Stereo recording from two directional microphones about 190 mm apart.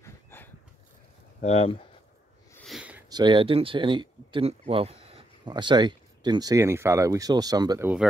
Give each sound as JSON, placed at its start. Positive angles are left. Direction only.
{"t": 0.0, "sound": "a sound", "side_deg": 10}
{"t": 1.4, "sound": "speech", "side_deg": 30}
{"t": 2.5, "sound": "sniff", "side_deg": 0}
{"t": 3.1, "sound": "speech", "side_deg": -25}